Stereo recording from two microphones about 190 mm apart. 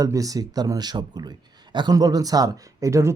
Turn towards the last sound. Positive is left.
turn(degrees=-15)  # may be behind; listen again after turning